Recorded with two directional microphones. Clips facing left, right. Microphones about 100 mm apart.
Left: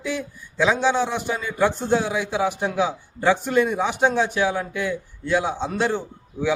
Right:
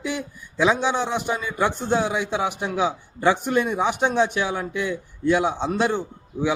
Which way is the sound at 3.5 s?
20° right (ahead or behind).